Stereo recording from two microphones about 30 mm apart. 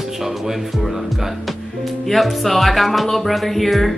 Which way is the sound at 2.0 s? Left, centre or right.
Centre.